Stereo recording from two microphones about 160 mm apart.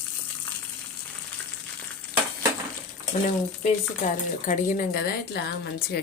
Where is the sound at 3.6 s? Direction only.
50° left (ahead or behind).